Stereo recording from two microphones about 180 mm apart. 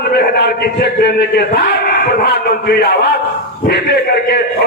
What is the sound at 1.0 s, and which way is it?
A man's voice, 60° left (ahead or behind).